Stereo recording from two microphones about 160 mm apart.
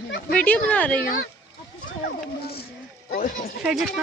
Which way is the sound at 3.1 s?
55° left (ahead or behind).